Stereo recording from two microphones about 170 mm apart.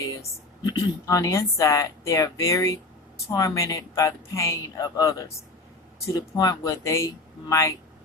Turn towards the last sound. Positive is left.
turn(degrees=20)  # may be behind; listen again after turning